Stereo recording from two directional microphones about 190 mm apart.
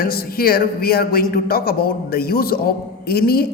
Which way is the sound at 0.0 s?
50° left (ahead or behind).